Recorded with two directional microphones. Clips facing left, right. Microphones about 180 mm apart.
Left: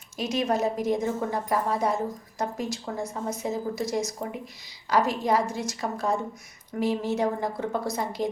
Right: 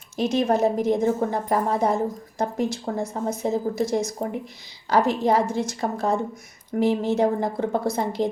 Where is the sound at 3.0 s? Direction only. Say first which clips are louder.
Right 4 dB; 55° right (ahead or behind).